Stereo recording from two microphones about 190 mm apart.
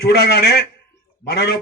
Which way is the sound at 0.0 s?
60° left (ahead or behind).